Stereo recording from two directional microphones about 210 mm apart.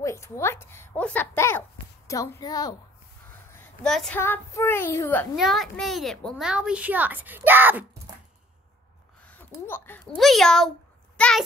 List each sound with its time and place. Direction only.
0.0 s a woman's voice: 15° left (ahead or behind)
3.8 s a woman's voice: centre (ahead or behind)
5.3 s a child's voice: centre (ahead or behind)
9.2 s speech: 10° left (ahead or behind)
11.1 s a sound: 5° left (ahead or behind)